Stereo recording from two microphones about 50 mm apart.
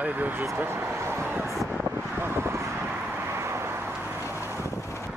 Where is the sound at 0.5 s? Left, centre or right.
Right.